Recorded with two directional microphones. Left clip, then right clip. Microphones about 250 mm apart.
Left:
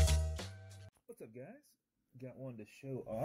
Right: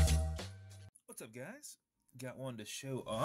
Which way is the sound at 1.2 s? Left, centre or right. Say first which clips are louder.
Right 4 dB; centre.